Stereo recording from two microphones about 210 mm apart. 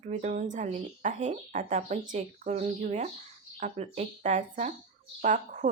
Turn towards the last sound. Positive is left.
turn(degrees=-35)  # may be behind; listen again after turning